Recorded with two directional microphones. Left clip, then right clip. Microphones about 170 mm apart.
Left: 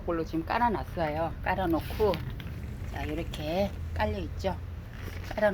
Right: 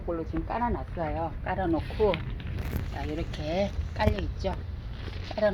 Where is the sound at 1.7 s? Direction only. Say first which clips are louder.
Right 5 dB; centre (ahead or behind).